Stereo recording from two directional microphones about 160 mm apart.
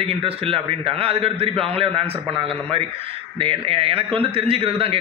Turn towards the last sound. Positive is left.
turn(degrees=-35)  # may be behind; listen again after turning